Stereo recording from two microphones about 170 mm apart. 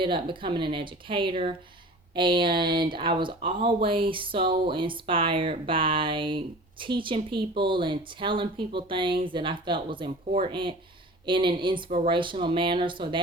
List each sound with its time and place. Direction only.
0.0 s speech: 30° right (ahead or behind)